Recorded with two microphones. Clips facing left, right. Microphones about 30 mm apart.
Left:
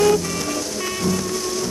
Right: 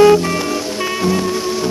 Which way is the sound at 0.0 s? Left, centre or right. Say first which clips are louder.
Right 7 dB; right.